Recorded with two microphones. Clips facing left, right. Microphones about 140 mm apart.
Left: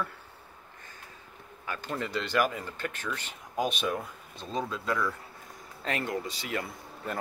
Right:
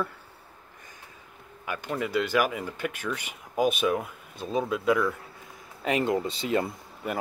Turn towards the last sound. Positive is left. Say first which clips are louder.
# right 4 dB
turn(degrees=-10)  # may be behind; listen again after turning